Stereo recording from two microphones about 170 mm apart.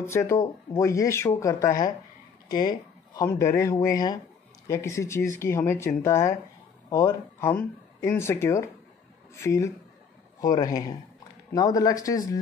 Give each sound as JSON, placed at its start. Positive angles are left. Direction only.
{"t": 0.0, "sound": "speech", "side_deg": 15}
{"t": 2.4, "sound": "a sound", "side_deg": 25}
{"t": 3.3, "sound": "speech", "side_deg": 15}